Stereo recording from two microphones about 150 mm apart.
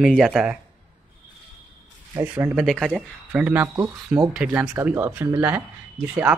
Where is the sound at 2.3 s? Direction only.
5° right (ahead or behind).